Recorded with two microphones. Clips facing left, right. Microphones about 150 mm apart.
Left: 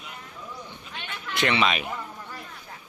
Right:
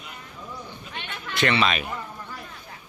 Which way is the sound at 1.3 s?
15° left (ahead or behind).